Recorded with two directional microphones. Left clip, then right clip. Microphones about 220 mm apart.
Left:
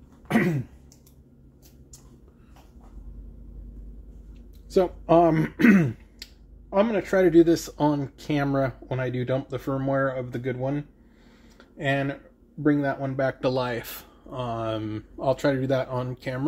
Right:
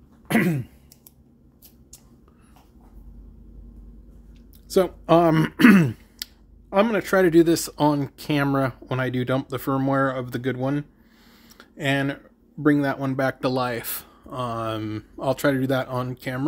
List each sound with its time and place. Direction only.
4.6 s speech: 25° right (ahead or behind)
11.4 s a sound: 30° right (ahead or behind)
12.6 s speech: 30° right (ahead or behind)